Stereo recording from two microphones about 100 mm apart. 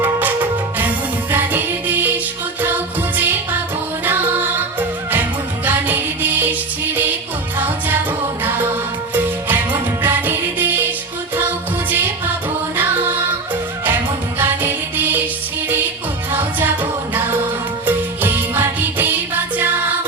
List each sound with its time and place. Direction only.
0.0 s music: 15° right (ahead or behind)
8.4 s music: 20° right (ahead or behind)
11.9 s music: 20° right (ahead or behind)
14.3 s music: 20° right (ahead or behind)
16.3 s music: 20° right (ahead or behind)
17.8 s music: 20° right (ahead or behind)